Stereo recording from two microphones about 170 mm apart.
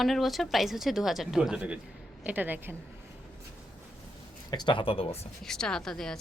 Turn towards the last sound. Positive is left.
turn(degrees=5)  # may be behind; listen again after turning